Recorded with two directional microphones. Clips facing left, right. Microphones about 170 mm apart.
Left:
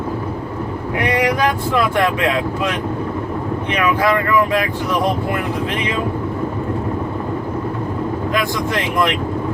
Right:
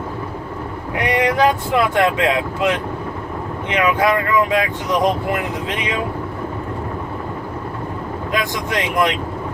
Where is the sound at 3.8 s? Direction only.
20° right (ahead or behind).